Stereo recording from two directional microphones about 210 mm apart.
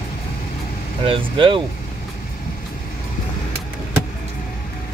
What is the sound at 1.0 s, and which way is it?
Speech, 25° right (ahead or behind).